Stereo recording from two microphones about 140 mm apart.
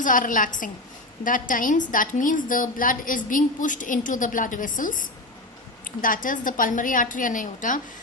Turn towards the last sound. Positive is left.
turn(degrees=65)  # may be behind; listen again after turning